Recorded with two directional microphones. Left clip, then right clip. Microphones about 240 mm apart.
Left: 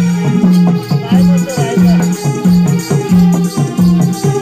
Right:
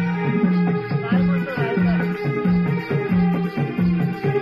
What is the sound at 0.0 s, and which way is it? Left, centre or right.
Music, left.